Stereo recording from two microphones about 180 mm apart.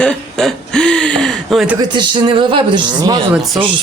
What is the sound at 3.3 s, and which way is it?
Speech, centre (ahead or behind).